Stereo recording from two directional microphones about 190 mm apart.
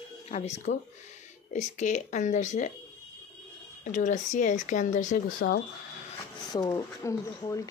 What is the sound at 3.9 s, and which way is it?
Speech, 40° left (ahead or behind).